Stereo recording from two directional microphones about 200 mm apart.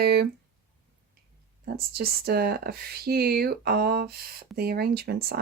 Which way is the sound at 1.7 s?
50° right (ahead or behind).